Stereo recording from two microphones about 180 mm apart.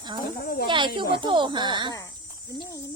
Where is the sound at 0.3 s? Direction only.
55° left (ahead or behind).